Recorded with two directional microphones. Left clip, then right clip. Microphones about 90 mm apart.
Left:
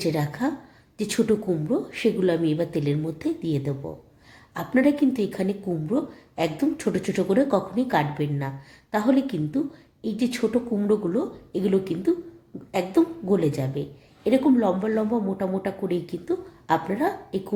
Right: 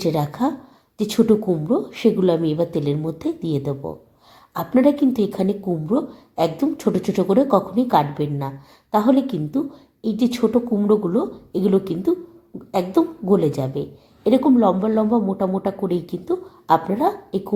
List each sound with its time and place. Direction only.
0.0 s speech: 40° right (ahead or behind)